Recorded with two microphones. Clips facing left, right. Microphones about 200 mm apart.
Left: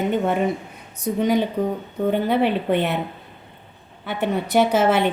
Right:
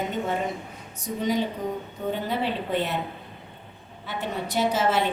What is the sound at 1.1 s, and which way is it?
A woman's voice, 70° left (ahead or behind).